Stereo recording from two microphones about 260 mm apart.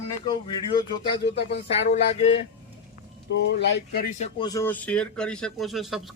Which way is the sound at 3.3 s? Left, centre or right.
Left.